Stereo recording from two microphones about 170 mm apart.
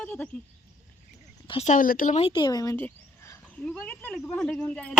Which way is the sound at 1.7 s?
55° left (ahead or behind).